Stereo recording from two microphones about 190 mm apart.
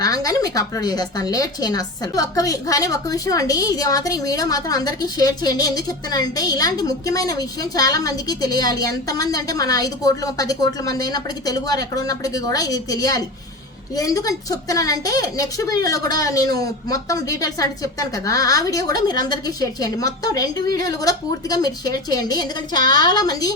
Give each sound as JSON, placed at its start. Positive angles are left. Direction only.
{"t": 0.0, "sound": "a woman's voice", "side_deg": 20}